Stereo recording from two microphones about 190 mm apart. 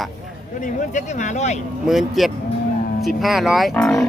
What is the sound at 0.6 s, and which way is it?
Speech, 40° left (ahead or behind).